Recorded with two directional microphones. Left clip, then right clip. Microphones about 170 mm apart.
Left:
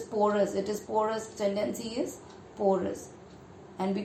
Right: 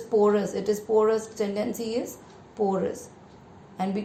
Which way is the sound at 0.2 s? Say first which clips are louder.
Right 2 dB; 35° right (ahead or behind).